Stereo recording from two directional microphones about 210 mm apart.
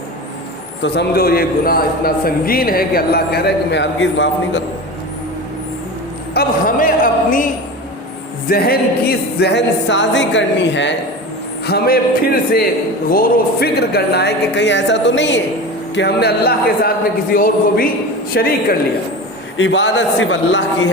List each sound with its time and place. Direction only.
0.8 s a man's voice: 50° left (ahead or behind)
6.3 s a sound: 40° left (ahead or behind)
8.4 s music: 45° left (ahead or behind)
11.6 s a man's voice: 45° left (ahead or behind)
18.3 s music: 55° left (ahead or behind)
19.5 s music: 60° left (ahead or behind)